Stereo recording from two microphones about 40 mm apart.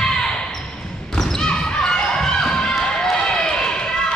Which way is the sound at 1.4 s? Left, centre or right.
Left.